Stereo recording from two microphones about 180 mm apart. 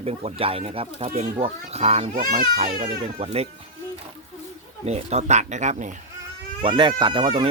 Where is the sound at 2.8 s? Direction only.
35° right (ahead or behind).